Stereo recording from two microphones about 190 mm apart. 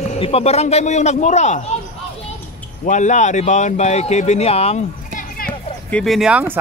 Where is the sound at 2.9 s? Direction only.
40° left (ahead or behind).